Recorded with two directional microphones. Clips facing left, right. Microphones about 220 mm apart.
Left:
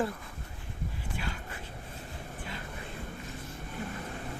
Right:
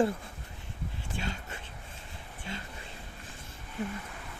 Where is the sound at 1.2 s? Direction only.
25° right (ahead or behind).